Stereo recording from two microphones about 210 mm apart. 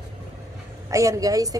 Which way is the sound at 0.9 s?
15° right (ahead or behind).